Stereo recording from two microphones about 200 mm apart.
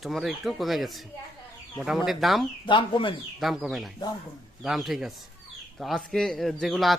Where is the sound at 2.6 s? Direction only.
25° left (ahead or behind).